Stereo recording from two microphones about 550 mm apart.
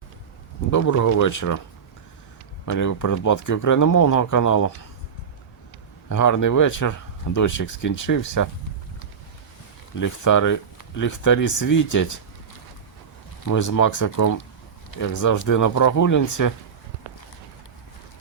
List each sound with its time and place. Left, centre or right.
0.7 s speech: left
2.6 s speech: left
6.1 s speech: left
10.0 s speech: left
13.5 s speech: left